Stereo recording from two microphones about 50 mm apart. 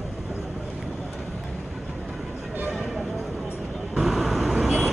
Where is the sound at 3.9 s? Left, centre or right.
Centre.